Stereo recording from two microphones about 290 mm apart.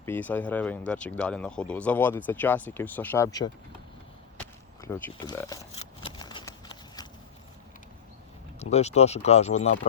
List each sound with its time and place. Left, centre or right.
0.0 s speech: centre
4.4 s a sound: centre
8.5 s speech: left